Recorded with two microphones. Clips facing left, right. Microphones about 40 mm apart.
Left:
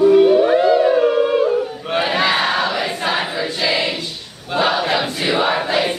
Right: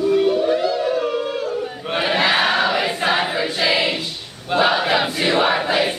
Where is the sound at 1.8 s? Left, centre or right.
Centre.